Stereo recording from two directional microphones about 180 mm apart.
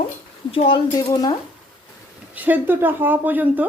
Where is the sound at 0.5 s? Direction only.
30° left (ahead or behind).